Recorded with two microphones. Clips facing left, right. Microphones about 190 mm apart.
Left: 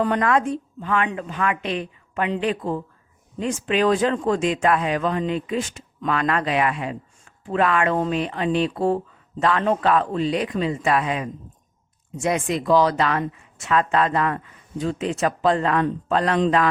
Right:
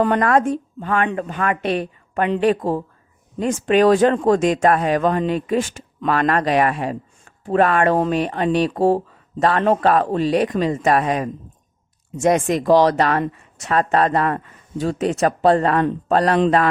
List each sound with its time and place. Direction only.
0.0 s a woman's voice: 55° right (ahead or behind)